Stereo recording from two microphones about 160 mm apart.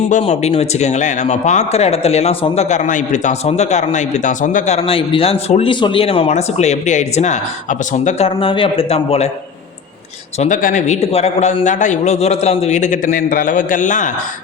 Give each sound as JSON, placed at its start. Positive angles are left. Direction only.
{"t": 0.1, "sound": "speech", "side_deg": 40}
{"t": 8.4, "sound": "a man's voice", "side_deg": 35}
{"t": 10.3, "sound": "speech", "side_deg": 50}